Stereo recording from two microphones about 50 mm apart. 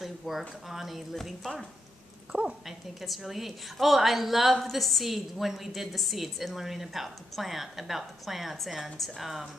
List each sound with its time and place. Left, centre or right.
0.0 s speech: centre
2.3 s a woman's voice: right
3.0 s a woman's voice: centre